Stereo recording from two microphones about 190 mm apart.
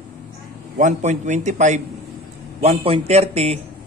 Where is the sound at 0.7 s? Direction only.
40° right (ahead or behind).